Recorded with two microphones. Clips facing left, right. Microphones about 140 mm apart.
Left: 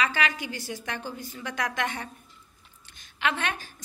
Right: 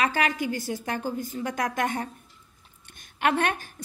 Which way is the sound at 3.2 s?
50° right (ahead or behind).